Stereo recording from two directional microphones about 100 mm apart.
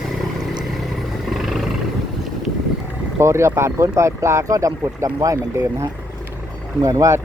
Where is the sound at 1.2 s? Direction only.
Centre (ahead or behind).